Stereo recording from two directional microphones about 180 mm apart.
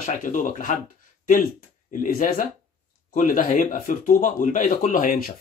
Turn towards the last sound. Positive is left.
turn(degrees=55)  # may be behind; listen again after turning